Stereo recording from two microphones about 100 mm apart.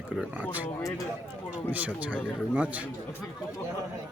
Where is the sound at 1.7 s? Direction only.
15° right (ahead or behind).